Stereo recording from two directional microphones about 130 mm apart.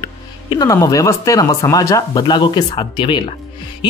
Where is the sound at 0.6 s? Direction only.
25° left (ahead or behind).